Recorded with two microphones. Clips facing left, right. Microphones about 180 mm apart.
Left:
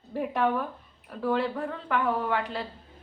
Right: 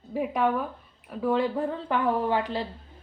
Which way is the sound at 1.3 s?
20° right (ahead or behind).